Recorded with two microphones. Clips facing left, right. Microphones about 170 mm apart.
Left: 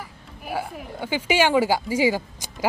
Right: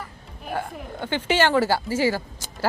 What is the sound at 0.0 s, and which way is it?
Speech, 5° left (ahead or behind).